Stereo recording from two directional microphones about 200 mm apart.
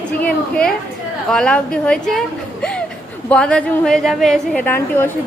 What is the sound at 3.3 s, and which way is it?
A woman's voice, 5° left (ahead or behind).